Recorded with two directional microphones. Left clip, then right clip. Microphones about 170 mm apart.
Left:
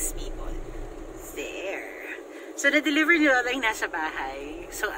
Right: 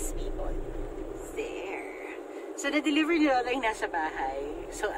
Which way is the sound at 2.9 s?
Centre (ahead or behind).